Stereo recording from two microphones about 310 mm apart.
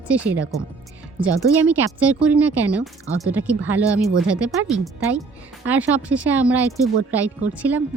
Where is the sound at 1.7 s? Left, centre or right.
Centre.